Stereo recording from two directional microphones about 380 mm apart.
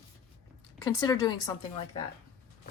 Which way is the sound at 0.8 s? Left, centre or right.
Centre.